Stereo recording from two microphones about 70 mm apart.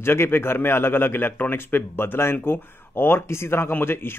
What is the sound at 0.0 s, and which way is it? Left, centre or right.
A man's voice, left.